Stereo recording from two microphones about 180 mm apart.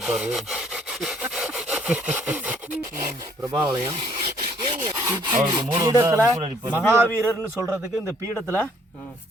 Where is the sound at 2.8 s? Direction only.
20° right (ahead or behind).